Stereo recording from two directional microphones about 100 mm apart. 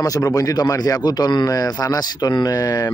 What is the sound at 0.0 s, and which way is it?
A man's voice, 35° left (ahead or behind).